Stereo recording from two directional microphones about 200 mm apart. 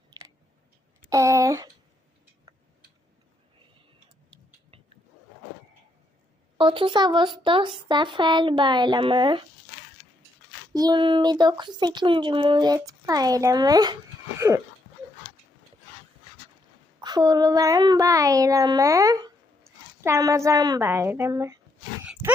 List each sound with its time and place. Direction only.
1.1 s speech: 15° right (ahead or behind)
6.6 s speech: 25° right (ahead or behind)
10.8 s speech: 20° right (ahead or behind)
17.0 s speech: 20° right (ahead or behind)
22.0 s wild animals: 5° right (ahead or behind)